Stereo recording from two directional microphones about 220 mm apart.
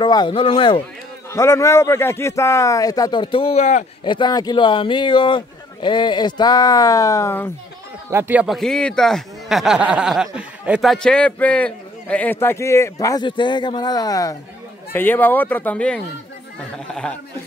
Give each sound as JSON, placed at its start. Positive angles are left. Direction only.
{"t": 0.0, "sound": "speech", "side_deg": 20}
{"t": 1.3, "sound": "a man's voice", "side_deg": 15}
{"t": 4.0, "sound": "speech", "side_deg": 20}
{"t": 8.1, "sound": "a man's voice", "side_deg": -10}